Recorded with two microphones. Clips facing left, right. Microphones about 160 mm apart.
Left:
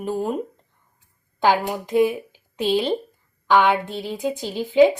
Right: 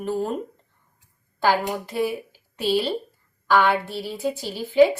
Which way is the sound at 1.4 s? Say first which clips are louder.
Left 2 dB; 15° left (ahead or behind).